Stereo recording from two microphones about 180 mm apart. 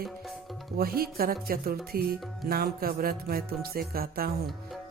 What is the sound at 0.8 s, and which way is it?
Speech, 55° right (ahead or behind).